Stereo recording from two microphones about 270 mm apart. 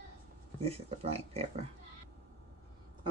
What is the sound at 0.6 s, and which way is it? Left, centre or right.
Speech, right.